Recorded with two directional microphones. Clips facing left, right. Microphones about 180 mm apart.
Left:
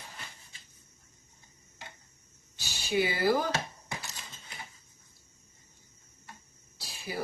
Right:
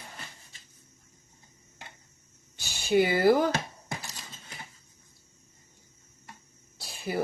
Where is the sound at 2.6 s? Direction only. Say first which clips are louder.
Right 5 dB; 55° right (ahead or behind).